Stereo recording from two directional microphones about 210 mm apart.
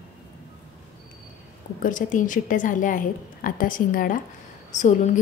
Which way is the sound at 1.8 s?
40° left (ahead or behind).